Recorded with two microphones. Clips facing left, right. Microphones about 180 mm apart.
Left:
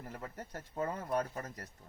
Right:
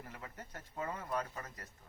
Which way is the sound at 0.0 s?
40° left (ahead or behind).